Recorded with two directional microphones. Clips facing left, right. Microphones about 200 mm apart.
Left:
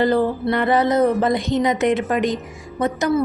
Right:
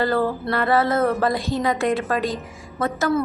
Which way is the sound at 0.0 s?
20° left (ahead or behind).